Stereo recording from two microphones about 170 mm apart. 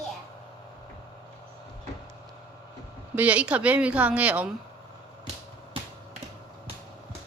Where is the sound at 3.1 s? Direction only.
10° right (ahead or behind).